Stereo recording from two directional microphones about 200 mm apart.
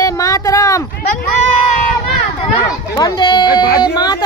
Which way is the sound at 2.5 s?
20° left (ahead or behind).